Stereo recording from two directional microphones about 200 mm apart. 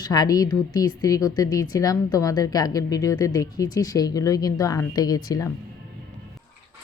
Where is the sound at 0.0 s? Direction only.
20° left (ahead or behind).